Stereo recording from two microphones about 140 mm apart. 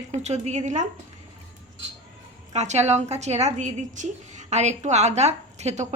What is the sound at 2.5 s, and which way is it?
A woman's voice, 55° right (ahead or behind).